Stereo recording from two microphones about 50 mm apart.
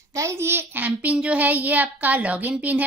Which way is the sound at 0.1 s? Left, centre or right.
Right.